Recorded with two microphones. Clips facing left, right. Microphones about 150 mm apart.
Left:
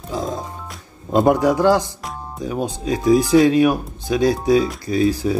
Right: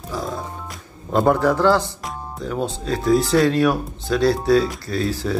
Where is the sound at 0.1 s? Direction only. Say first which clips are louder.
Left 3 dB; 20° left (ahead or behind).